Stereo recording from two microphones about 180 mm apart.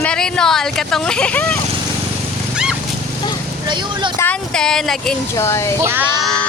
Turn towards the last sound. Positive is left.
turn(degrees=5)  # may be behind; listen again after turning